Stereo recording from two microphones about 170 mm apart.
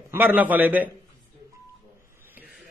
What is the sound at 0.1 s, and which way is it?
Speech, 10° right (ahead or behind).